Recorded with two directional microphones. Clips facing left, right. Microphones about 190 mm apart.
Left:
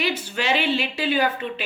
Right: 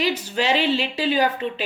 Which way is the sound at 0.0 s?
40° right (ahead or behind).